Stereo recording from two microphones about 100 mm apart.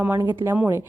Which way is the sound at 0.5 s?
20° right (ahead or behind).